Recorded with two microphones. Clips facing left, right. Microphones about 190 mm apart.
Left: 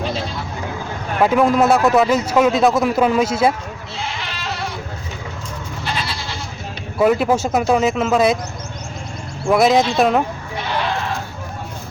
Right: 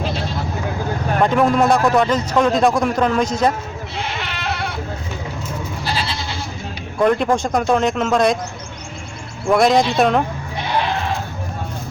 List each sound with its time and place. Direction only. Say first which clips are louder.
1.2 s speech: left 1 dB; 5° left (ahead or behind)
3.9 s goat: right 2 dB; 60° right (ahead or behind)
7.0 s speech: left 1 dB; 5° left (ahead or behind)
9.5 s speech: even; centre (ahead or behind)